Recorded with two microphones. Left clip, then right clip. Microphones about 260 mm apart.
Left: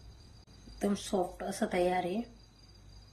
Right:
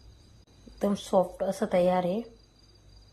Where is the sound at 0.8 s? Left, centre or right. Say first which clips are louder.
Right 7 dB; centre.